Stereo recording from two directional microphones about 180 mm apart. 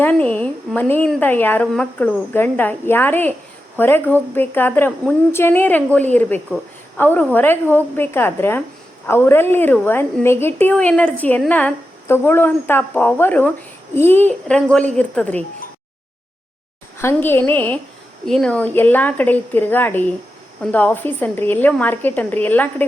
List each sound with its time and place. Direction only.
0.0 s a woman's voice: 10° left (ahead or behind)
17.0 s a woman's voice: 15° left (ahead or behind)